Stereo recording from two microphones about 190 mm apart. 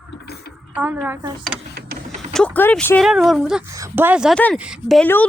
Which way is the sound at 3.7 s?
15° right (ahead or behind).